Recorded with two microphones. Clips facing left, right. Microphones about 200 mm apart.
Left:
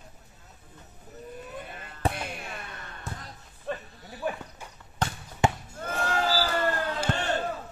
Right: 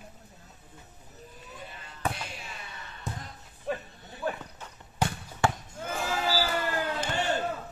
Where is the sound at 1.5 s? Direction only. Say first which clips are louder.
Left 5 dB; 55° left (ahead or behind).